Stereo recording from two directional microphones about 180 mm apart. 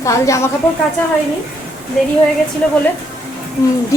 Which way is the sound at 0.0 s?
15° left (ahead or behind).